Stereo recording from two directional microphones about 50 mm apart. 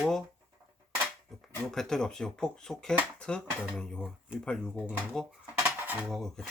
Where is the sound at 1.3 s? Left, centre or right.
Centre.